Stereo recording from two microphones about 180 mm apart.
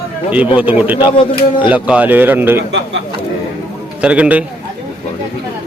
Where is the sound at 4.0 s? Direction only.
5° right (ahead or behind).